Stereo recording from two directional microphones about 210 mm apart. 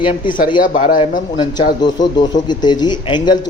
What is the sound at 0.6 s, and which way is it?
Speech, 40° left (ahead or behind).